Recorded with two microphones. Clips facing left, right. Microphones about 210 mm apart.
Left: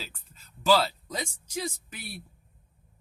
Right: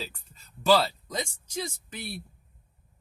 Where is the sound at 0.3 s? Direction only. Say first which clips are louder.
Right 1 dB; centre (ahead or behind).